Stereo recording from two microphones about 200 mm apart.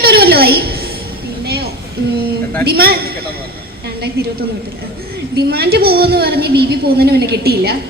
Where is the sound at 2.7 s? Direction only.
50° right (ahead or behind).